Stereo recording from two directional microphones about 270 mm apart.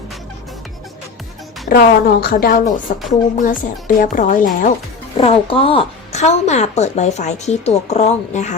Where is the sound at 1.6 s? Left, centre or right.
Left.